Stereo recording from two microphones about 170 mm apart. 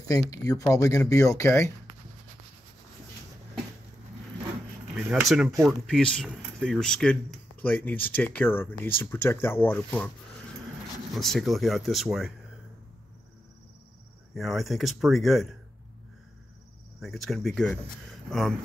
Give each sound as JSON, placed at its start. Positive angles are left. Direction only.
{"t": 0.0, "sound": "speech", "side_deg": 20}
{"t": 4.9, "sound": "speech", "side_deg": -5}
{"t": 11.1, "sound": "speech", "side_deg": 0}
{"t": 14.3, "sound": "speech", "side_deg": 0}
{"t": 17.0, "sound": "speech", "side_deg": 0}